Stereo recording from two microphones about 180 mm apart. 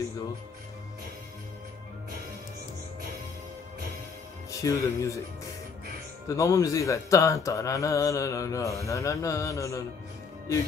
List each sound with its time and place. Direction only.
4.5 s speech: 15° left (ahead or behind)
6.2 s speech: 15° left (ahead or behind)